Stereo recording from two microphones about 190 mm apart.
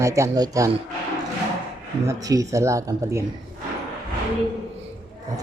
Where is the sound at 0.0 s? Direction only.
15° right (ahead or behind).